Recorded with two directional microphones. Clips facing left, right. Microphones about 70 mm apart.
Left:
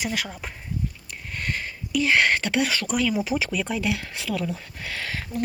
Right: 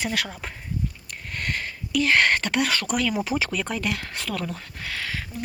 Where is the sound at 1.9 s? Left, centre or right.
Centre.